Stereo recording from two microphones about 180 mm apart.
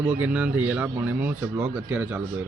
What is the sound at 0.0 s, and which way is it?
Speech, 10° right (ahead or behind).